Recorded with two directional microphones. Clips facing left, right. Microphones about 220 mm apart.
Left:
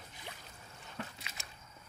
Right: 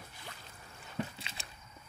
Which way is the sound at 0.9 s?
30° right (ahead or behind).